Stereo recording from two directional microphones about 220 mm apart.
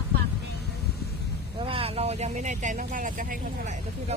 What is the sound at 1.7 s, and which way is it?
Speech, 25° right (ahead or behind).